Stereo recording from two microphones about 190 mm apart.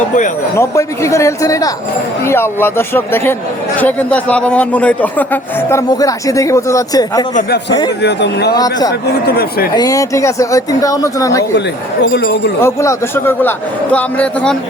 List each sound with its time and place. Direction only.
0.5 s a man's voice: 15° left (ahead or behind)
8.0 s speech: 60° left (ahead or behind)
8.5 s speech: 20° left (ahead or behind)
9.2 s speech: 55° left (ahead or behind)
9.7 s a man's voice: 20° left (ahead or behind)
12.0 s speech: 60° left (ahead or behind)
12.6 s a man's voice: 15° left (ahead or behind)